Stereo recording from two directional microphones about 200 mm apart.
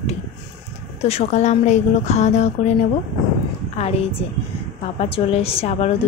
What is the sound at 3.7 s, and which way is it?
Speech, 30° left (ahead or behind).